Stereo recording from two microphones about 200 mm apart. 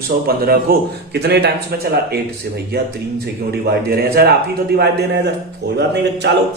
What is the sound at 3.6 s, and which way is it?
Speech, 50° right (ahead or behind).